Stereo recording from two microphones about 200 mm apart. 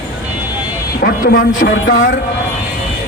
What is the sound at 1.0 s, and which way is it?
Speech, 45° left (ahead or behind).